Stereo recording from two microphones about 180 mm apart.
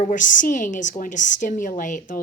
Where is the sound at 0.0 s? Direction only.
45° left (ahead or behind).